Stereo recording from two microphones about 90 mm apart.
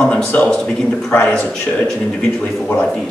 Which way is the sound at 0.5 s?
10° left (ahead or behind).